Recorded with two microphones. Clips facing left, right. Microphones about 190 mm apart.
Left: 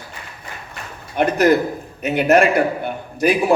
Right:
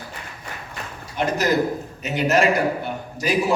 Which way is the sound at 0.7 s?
55° left (ahead or behind).